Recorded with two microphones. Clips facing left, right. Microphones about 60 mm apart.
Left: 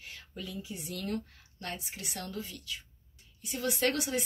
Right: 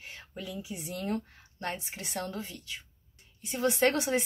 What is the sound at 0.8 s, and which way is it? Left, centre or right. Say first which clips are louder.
A woman's voice: right 3 dB; right.